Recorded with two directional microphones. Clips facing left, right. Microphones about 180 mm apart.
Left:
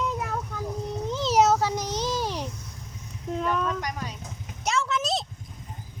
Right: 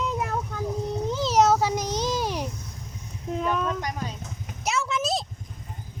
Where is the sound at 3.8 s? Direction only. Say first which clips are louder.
Right 1 dB; 25° right (ahead or behind).